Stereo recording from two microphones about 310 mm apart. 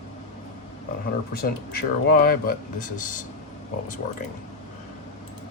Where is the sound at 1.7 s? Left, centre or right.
Left.